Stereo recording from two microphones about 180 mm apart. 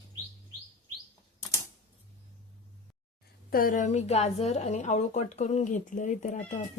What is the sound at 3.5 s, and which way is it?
A woman's voice, 50° left (ahead or behind).